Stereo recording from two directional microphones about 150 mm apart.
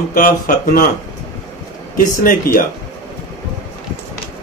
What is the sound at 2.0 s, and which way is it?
Speech, 70° left (ahead or behind).